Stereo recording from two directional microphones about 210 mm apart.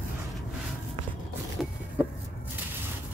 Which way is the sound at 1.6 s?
Centre (ahead or behind).